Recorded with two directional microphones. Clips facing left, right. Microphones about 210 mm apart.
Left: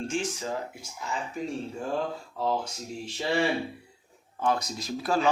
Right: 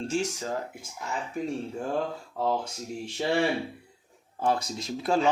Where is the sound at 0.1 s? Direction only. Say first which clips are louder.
Right 2 dB; 40° right (ahead or behind).